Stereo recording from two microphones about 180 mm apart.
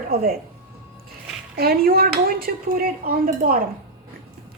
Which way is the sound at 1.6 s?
60° right (ahead or behind).